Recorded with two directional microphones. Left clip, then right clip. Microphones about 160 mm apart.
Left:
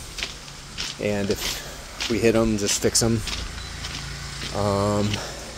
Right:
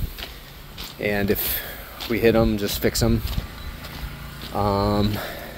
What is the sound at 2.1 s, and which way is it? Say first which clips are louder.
Speech: right 2 dB; 5° right (ahead or behind).